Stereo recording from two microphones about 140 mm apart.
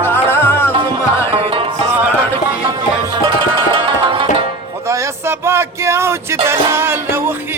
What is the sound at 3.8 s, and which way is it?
Music, 35° right (ahead or behind).